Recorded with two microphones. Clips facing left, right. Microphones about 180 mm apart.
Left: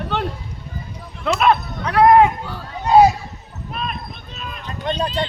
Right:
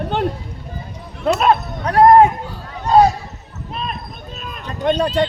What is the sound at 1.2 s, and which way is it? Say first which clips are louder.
Speech: right 2 dB; 40° right (ahead or behind).